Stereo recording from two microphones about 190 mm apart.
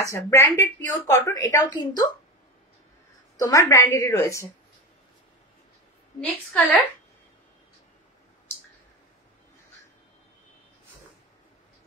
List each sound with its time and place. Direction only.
0.0 s a woman's voice: 15° left (ahead or behind)
3.4 s a woman's voice: 15° left (ahead or behind)
6.2 s a woman's voice: centre (ahead or behind)